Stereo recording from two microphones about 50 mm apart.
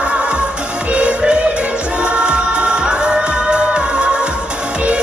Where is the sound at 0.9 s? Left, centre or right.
Right.